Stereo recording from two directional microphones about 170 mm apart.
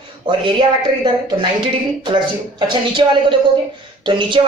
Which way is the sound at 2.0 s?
25° right (ahead or behind).